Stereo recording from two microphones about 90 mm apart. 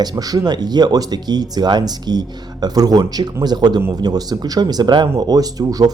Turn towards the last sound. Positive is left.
turn(degrees=-45)  # may be behind; listen again after turning